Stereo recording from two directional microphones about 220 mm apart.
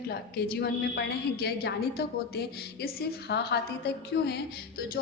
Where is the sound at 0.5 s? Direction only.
50° left (ahead or behind).